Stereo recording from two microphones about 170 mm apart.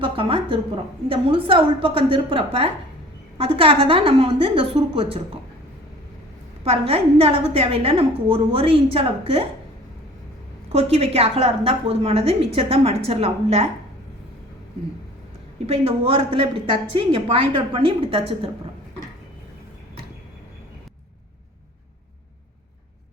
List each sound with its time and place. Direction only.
0.0 s a sound: 30° right (ahead or behind)
1.0 s a woman's voice: 35° right (ahead or behind)
6.7 s a woman's voice: 35° right (ahead or behind)
10.7 s a woman's voice: 35° right (ahead or behind)
15.6 s a woman's voice: 35° right (ahead or behind)